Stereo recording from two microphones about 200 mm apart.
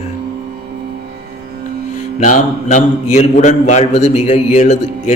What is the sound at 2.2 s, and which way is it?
A man's voice, 40° left (ahead or behind).